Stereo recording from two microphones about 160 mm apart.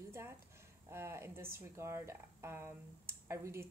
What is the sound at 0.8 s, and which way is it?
Speech, 15° right (ahead or behind).